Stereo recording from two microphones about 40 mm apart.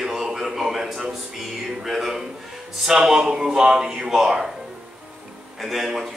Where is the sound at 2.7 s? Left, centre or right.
Centre.